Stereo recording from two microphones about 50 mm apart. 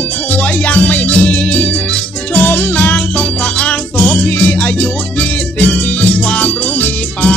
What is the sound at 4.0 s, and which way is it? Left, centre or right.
Music, left.